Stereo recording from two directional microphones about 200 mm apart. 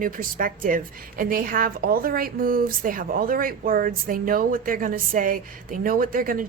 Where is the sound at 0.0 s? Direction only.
45° right (ahead or behind).